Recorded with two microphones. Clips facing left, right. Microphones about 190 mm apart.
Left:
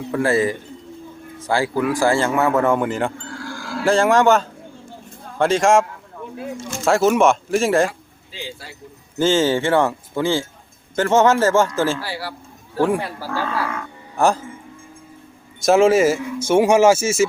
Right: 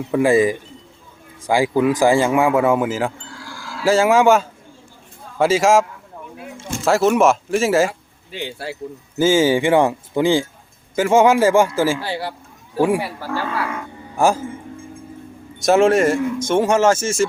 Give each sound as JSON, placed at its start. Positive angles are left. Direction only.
{"t": 0.1, "sound": "speech", "side_deg": -15}
{"t": 6.8, "sound": "speech", "side_deg": 0}
{"t": 7.9, "sound": "speech", "side_deg": -60}
{"t": 9.1, "sound": "speech", "side_deg": -10}
{"t": 11.9, "sound": "a man's voice", "side_deg": -20}
{"t": 12.7, "sound": "speech", "side_deg": -10}
{"t": 14.2, "sound": "speech", "side_deg": -10}
{"t": 15.6, "sound": "speech", "side_deg": 0}